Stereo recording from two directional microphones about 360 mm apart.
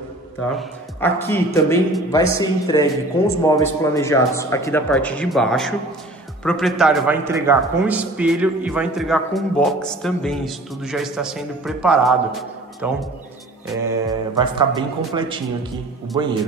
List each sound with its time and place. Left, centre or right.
0.6 s a man's voice: centre